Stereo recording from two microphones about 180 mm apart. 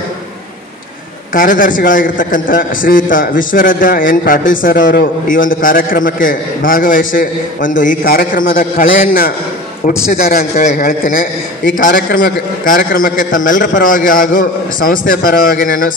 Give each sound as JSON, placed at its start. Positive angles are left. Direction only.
{"t": 1.3, "sound": "a man's voice", "side_deg": 50}
{"t": 10.8, "sound": "a man's voice", "side_deg": 55}